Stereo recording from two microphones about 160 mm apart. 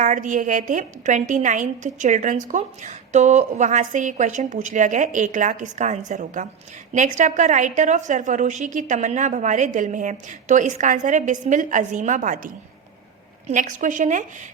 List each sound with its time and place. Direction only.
0.0 s a woman's voice: 50° right (ahead or behind)
13.5 s a woman's voice: 55° right (ahead or behind)